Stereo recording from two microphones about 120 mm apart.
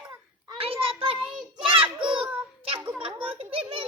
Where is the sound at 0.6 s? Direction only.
50° right (ahead or behind).